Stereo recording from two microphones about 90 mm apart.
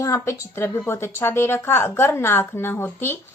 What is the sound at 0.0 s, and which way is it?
A woman's voice, 35° left (ahead or behind).